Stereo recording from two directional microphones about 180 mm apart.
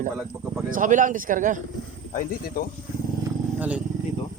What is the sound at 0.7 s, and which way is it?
Speech, 45° right (ahead or behind).